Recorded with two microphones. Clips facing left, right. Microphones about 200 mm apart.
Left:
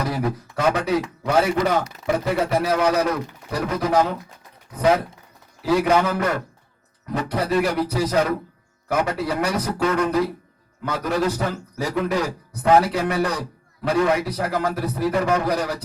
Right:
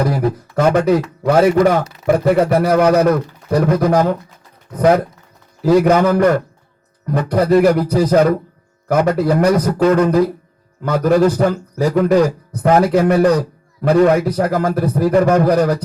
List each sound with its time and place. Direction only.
0.5 s a man's voice: 50° right (ahead or behind)
5.6 s a man's voice: 45° right (ahead or behind)